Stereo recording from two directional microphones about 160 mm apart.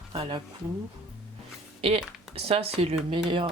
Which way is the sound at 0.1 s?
30° right (ahead or behind).